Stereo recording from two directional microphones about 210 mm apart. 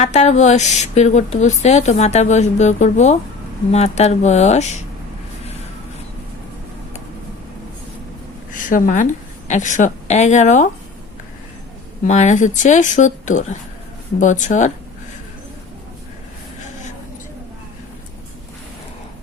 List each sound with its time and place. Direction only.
0.0 s a woman's voice: 35° left (ahead or behind)
8.5 s a woman's voice: 40° left (ahead or behind)
12.0 s a woman's voice: 35° left (ahead or behind)